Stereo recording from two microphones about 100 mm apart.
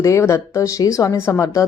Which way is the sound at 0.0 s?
30° left (ahead or behind).